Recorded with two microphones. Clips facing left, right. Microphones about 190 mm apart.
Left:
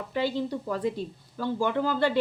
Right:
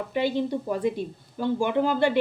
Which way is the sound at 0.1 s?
20° right (ahead or behind).